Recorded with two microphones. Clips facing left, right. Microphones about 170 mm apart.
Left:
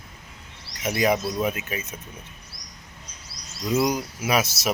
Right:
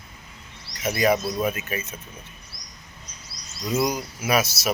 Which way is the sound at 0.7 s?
15° left (ahead or behind).